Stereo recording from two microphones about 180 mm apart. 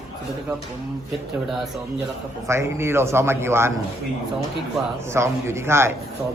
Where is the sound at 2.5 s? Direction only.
15° right (ahead or behind).